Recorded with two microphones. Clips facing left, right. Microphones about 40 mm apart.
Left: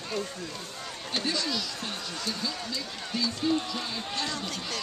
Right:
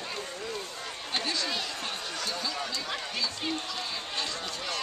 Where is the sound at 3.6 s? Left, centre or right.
Centre.